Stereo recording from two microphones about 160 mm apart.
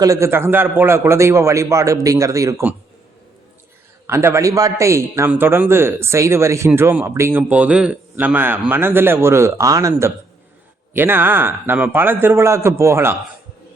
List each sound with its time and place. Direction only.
0.0 s a man's voice: 20° right (ahead or behind)
4.0 s a man's voice: 15° right (ahead or behind)